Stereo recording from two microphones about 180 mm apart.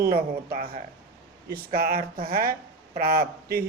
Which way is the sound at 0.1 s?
55° right (ahead or behind).